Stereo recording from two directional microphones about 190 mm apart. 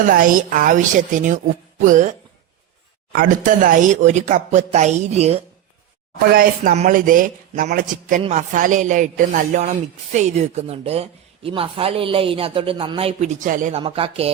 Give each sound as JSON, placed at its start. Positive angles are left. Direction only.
{"t": 0.0, "sound": "a man's voice", "side_deg": -45}
{"t": 6.3, "sound": "a man's voice", "side_deg": -45}
{"t": 8.2, "sound": "speech", "side_deg": -35}
{"t": 13.8, "sound": "speech", "side_deg": -30}